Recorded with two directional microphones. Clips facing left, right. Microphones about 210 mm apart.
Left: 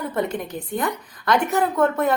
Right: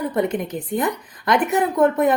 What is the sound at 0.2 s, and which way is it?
A woman's voice, 20° right (ahead or behind).